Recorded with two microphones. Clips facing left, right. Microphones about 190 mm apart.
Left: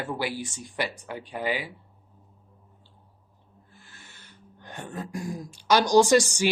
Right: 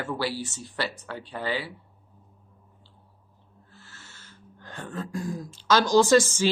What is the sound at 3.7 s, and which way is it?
Throat clearing, 15° left (ahead or behind).